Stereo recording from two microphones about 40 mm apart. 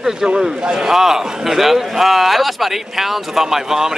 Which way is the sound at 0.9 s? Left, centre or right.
Centre.